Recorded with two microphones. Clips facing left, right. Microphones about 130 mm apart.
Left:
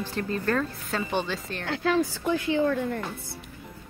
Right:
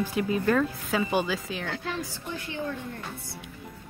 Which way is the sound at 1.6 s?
90° left.